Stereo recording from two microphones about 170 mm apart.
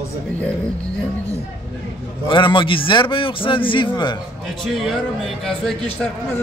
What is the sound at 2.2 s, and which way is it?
A man's voice, 30° left (ahead or behind).